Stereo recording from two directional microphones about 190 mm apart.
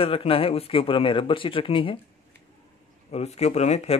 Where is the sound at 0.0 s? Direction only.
30° left (ahead or behind).